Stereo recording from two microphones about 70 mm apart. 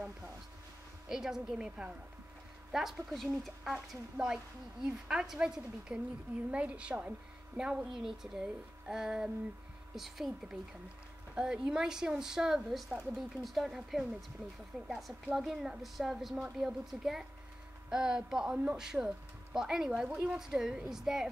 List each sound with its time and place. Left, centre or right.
1.0 s a woman's voice: centre